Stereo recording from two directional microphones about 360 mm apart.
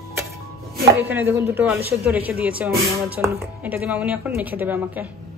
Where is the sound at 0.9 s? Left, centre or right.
Centre.